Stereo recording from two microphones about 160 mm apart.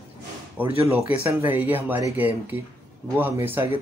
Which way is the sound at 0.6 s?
10° right (ahead or behind).